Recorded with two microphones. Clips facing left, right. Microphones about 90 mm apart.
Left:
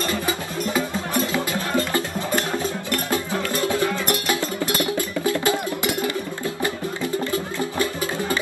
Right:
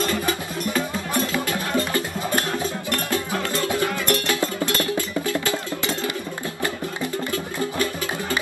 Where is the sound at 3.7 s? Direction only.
20° left (ahead or behind).